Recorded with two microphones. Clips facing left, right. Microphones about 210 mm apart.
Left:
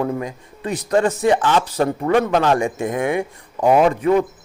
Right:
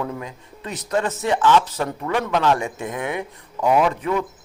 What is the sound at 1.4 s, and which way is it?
Speech, 50° left (ahead or behind).